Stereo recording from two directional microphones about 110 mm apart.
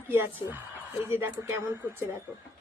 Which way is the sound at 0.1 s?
20° right (ahead or behind).